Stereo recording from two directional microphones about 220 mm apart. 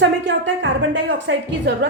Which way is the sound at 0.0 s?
55° right (ahead or behind).